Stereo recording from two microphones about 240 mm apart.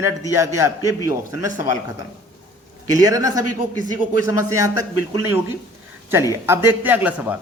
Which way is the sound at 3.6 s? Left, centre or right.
Right.